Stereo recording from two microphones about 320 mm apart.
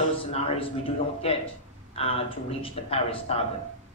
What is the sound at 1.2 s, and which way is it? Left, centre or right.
A man's voice, centre.